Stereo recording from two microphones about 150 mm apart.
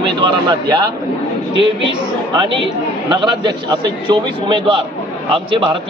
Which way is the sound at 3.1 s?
30° right (ahead or behind).